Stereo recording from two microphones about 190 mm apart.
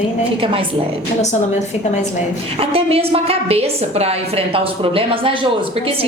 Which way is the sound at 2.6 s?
30° right (ahead or behind).